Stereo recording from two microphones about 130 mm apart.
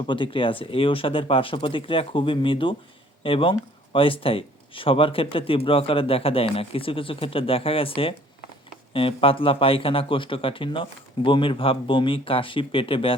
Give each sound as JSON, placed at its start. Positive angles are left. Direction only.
{"t": 0.1, "sound": "a man's voice", "side_deg": 40}